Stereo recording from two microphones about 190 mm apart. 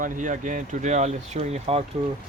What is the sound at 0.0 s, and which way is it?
Speech, 45° right (ahead or behind).